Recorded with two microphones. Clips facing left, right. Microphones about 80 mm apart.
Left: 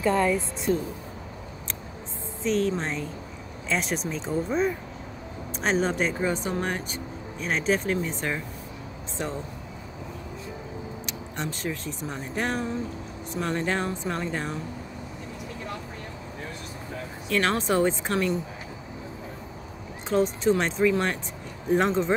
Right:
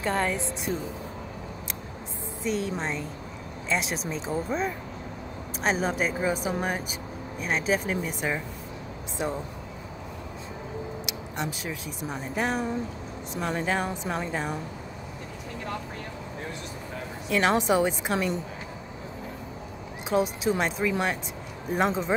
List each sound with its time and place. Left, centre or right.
2.4 s speech: centre
11.1 s speech: centre
17.3 s speech: centre
20.1 s speech: centre